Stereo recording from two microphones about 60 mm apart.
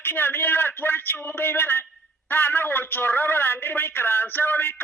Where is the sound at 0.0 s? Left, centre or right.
Left.